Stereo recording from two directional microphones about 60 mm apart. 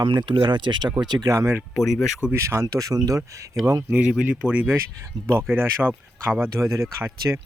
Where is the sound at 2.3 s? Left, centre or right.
Right.